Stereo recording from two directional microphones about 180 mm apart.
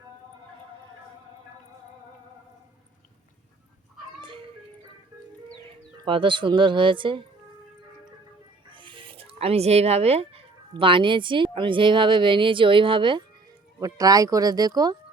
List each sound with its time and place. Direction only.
6.1 s speech: 25° right (ahead or behind)
8.7 s speech: 30° right (ahead or behind)